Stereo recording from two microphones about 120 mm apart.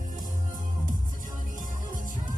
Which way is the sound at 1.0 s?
90° right.